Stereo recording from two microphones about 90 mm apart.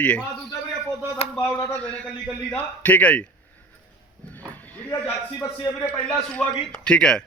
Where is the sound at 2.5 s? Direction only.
15° left (ahead or behind).